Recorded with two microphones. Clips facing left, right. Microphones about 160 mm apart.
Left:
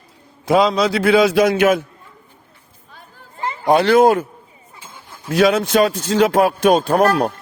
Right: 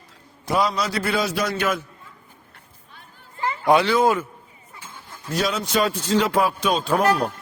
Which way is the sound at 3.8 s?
65° left (ahead or behind).